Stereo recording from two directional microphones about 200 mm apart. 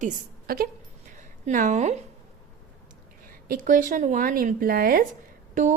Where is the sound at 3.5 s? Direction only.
45° right (ahead or behind).